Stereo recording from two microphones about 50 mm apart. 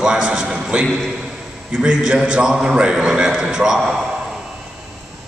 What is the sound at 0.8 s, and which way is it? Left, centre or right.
Speech, centre.